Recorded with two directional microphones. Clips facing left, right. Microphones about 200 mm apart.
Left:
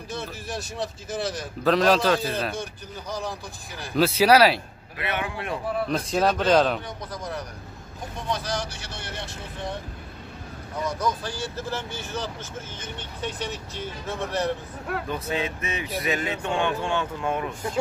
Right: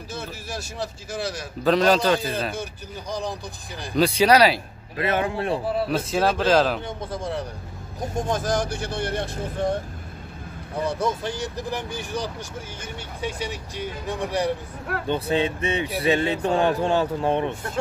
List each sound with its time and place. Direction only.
0.1 s a man's voice: centre (ahead or behind)
3.1 s speech: 15° right (ahead or behind)
3.9 s a man's voice: 5° left (ahead or behind)
4.9 s speech: 40° right (ahead or behind)
5.9 s a man's voice: 5° right (ahead or behind)
7.0 s speech: 30° right (ahead or behind)
8.0 s speech: 45° right (ahead or behind)
10.8 s speech: 30° right (ahead or behind); by 14.5 s 15° right (ahead or behind)
15.0 s speech: 30° right (ahead or behind)